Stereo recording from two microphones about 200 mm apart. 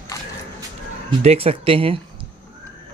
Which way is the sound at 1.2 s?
30° right (ahead or behind).